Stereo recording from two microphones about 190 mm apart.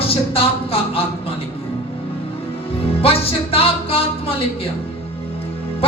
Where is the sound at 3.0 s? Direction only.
30° left (ahead or behind).